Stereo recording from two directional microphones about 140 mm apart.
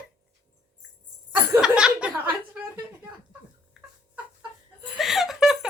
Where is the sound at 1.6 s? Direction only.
5° right (ahead or behind).